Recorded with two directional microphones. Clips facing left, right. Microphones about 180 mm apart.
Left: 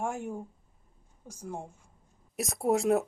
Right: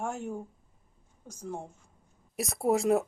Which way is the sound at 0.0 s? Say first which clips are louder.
Left 1 dB; 15° left (ahead or behind).